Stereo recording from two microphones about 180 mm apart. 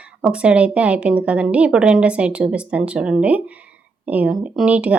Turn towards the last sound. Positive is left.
turn(degrees=-5)  # may be behind; listen again after turning